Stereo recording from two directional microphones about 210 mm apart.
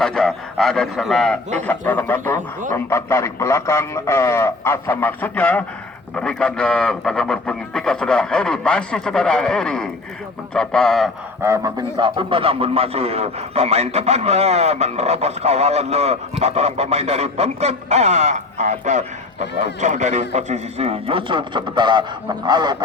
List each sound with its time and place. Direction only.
0.0 s a man's voice: 5° left (ahead or behind)
11.4 s a man's voice: 15° right (ahead or behind)